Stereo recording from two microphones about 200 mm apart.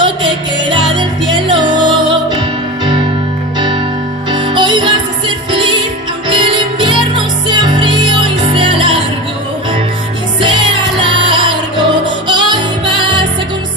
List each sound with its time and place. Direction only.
0.0 s music: 25° right (ahead or behind)
4.3 s music: 25° right (ahead or behind)
10.4 s music: 25° right (ahead or behind)